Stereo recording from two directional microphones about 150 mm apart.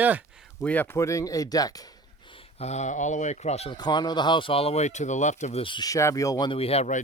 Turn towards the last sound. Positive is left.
turn(degrees=50)  # may be behind; listen again after turning